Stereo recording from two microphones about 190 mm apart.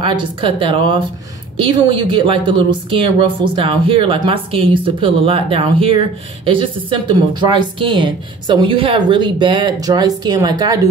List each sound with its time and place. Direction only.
0.0 s speech: 25° right (ahead or behind)